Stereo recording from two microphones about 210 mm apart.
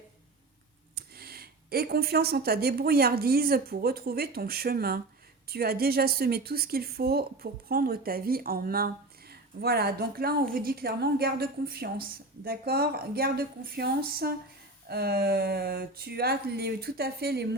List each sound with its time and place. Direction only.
0.9 s a woman's voice: 45° right (ahead or behind)